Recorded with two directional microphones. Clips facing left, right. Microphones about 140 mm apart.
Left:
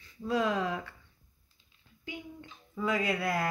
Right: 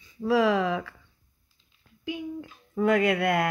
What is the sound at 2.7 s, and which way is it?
Speech, 60° right (ahead or behind).